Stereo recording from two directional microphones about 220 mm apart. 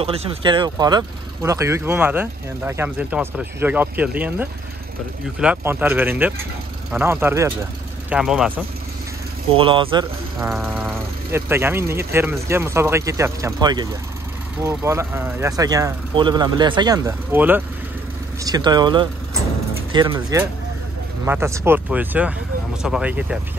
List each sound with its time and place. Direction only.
0.0 s speech: 25° right (ahead or behind); by 8.5 s centre (ahead or behind)
9.6 s speech: 25° right (ahead or behind)
11.3 s speech: 10° right (ahead or behind)